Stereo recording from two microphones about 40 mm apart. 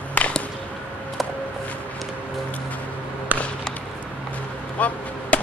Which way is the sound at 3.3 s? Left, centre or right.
Right.